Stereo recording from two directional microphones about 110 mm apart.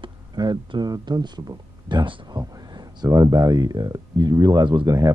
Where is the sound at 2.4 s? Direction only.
35° right (ahead or behind).